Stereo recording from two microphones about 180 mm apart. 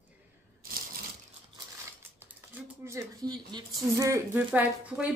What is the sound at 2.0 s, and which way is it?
Cutlery, 15° right (ahead or behind).